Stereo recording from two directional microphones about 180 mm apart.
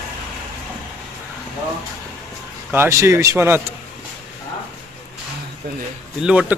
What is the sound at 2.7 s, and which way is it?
Speech, 15° right (ahead or behind).